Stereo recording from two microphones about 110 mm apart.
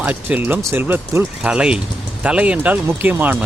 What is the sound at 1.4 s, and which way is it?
Speech, 10° right (ahead or behind).